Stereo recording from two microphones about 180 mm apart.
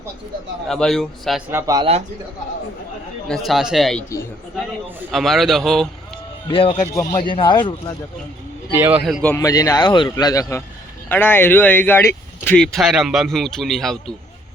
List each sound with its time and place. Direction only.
0.7 s speech: centre (ahead or behind)
1.5 s speech: 15° right (ahead or behind)
3.2 s speech: centre (ahead or behind)
5.1 s speech: centre (ahead or behind)
6.5 s a man's voice: 30° left (ahead or behind)
8.8 s a man's voice: 10° right (ahead or behind)
9.2 s a man's voice: 15° left (ahead or behind)